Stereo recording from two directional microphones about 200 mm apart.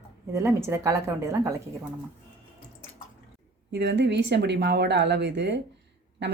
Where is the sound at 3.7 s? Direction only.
55° right (ahead or behind).